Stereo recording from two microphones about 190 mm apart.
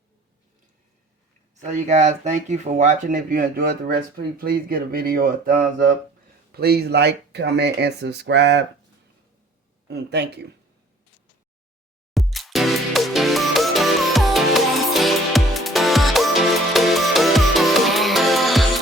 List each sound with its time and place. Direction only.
1.5 s speech: 40° right (ahead or behind); by 8.6 s 65° right (ahead or behind)
9.9 s speech: 60° right (ahead or behind)
12.1 s music: centre (ahead or behind)